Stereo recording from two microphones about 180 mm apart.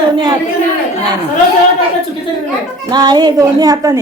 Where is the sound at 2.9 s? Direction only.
20° right (ahead or behind).